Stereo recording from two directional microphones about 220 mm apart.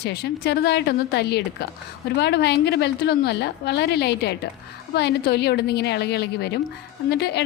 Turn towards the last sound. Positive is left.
turn(degrees=50)  # may be behind; listen again after turning